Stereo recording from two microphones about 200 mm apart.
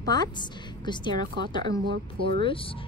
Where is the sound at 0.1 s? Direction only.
20° left (ahead or behind).